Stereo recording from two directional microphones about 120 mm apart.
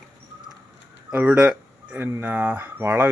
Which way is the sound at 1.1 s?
15° right (ahead or behind).